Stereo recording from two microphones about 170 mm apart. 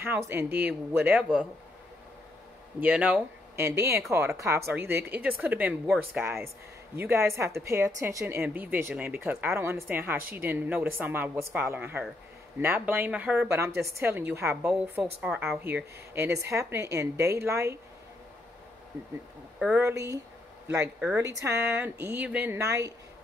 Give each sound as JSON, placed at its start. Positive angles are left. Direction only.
{"t": 0.0, "sound": "a woman's voice", "side_deg": -15}
{"t": 2.8, "sound": "a woman's voice", "side_deg": -10}
{"t": 19.6, "sound": "a woman's voice", "side_deg": -10}